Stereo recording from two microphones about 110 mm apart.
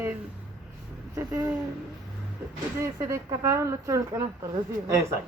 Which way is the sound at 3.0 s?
25° right (ahead or behind).